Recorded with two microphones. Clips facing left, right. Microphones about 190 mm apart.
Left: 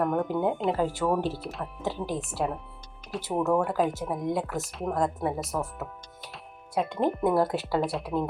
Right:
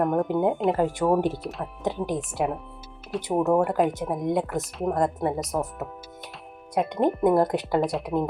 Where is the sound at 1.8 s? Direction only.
20° right (ahead or behind).